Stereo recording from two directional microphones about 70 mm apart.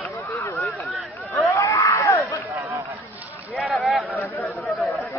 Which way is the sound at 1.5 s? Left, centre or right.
Left.